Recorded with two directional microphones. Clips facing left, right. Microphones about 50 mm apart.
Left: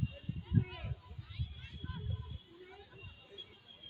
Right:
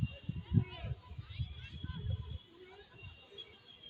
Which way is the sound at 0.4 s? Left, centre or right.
Centre.